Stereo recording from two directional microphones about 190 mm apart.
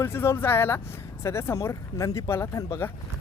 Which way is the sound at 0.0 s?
15° left (ahead or behind).